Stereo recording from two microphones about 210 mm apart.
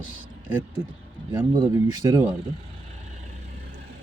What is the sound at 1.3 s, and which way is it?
Speech, 15° right (ahead or behind).